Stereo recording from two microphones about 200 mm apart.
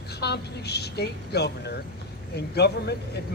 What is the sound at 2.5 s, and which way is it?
Speech, 55° left (ahead or behind).